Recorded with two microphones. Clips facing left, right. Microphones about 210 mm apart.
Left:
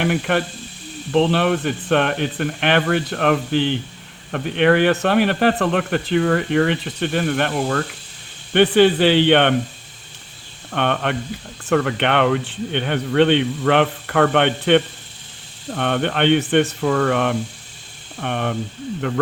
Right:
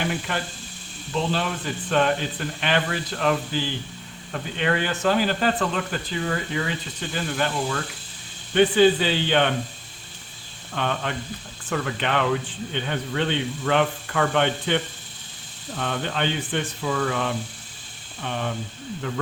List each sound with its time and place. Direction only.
0.0 s speech: 65° left (ahead or behind)
10.7 s speech: 65° left (ahead or behind)